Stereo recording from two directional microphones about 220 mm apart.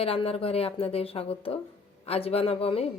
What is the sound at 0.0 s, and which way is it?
A woman's voice, 25° left (ahead or behind).